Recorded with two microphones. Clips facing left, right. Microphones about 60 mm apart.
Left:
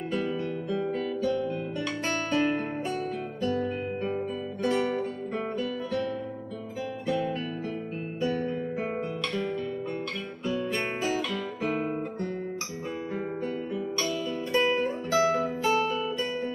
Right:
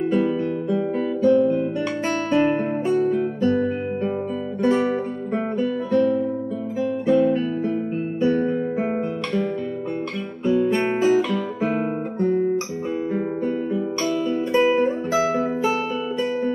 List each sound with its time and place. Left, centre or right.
0.1 s guitar: centre
4.6 s guitar: centre
10.4 s guitar: right
13.7 s music: right